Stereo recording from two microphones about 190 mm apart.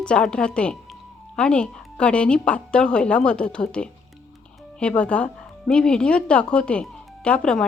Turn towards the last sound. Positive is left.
turn(degrees=5)  # may be behind; listen again after turning